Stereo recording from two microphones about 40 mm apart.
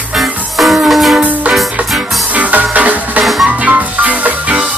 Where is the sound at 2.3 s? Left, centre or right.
Right.